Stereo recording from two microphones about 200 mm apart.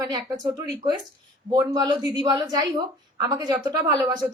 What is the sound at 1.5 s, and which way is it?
A woman's voice, 20° right (ahead or behind).